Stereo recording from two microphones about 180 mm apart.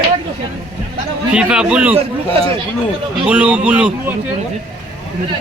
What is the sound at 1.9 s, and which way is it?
Speech, 35° right (ahead or behind).